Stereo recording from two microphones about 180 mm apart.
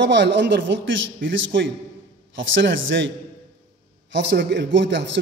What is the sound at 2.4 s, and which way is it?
Speech, 90° right.